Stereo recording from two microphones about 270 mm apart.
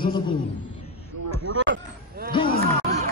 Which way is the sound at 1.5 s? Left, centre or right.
Right.